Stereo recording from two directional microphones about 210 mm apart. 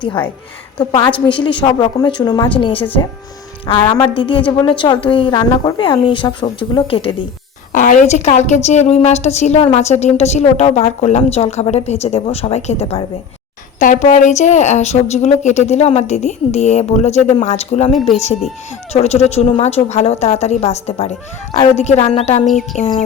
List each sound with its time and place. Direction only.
0.8 s a woman's voice: 25° left (ahead or behind)
2.8 s speech: 10° left (ahead or behind)
3.7 s a woman's voice: 20° left (ahead or behind)
4.4 s speech: 5° left (ahead or behind)
4.6 s a woman's voice: 20° left (ahead or behind)
7.7 s a woman's voice: 40° left (ahead or behind)
18.9 s a woman's voice: 30° left (ahead or behind)
22.4 s a sound: centre (ahead or behind)
22.8 s a woman's voice: 30° left (ahead or behind)